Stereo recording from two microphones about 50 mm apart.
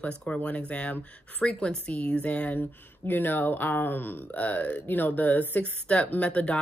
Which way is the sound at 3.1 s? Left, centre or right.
Left.